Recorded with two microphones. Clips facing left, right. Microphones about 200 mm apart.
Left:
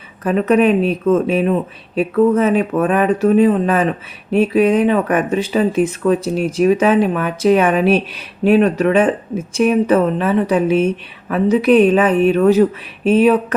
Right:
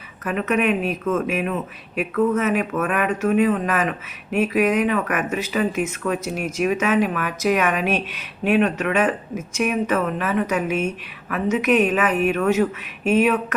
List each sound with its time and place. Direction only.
0.3 s speech: 35° left (ahead or behind)